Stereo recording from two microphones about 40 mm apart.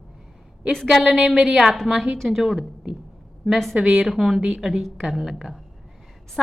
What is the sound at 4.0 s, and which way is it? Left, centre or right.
A woman's voice, centre.